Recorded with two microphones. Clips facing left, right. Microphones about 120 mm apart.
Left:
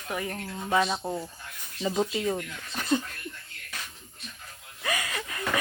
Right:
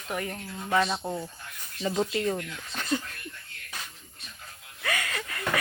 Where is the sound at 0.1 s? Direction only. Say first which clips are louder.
Even; 5° left (ahead or behind).